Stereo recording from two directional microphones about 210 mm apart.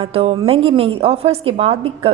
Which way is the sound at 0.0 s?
25° right (ahead or behind).